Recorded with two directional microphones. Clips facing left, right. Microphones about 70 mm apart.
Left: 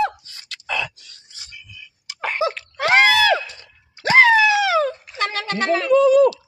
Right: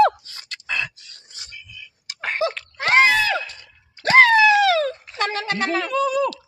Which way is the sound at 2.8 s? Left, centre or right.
Left.